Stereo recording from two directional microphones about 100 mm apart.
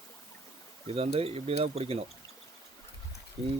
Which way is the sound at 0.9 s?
80° right.